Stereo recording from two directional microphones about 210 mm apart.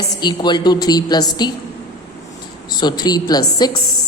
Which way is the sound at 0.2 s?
20° left (ahead or behind).